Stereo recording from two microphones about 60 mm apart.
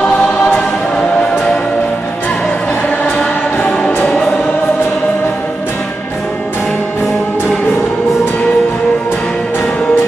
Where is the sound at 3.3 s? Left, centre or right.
Left.